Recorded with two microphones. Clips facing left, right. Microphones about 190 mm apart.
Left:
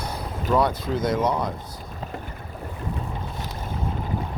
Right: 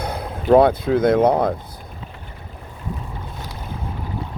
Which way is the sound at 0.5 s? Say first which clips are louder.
Right 9 dB; 55° right (ahead or behind).